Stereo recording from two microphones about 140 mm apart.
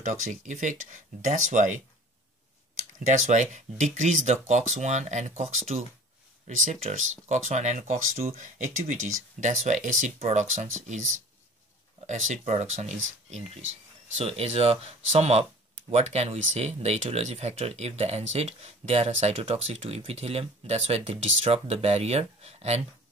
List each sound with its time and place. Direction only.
0.0 s speech: 65° right (ahead or behind)
3.1 s speech: 60° right (ahead or behind)
12.1 s speech: 60° right (ahead or behind)